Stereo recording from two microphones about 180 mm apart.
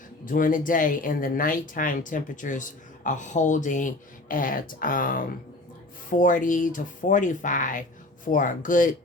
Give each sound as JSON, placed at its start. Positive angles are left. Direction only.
{"t": 0.3, "sound": "speech", "side_deg": 50}